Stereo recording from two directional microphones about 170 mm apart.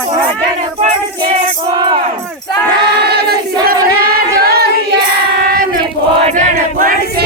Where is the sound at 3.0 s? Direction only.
70° right (ahead or behind).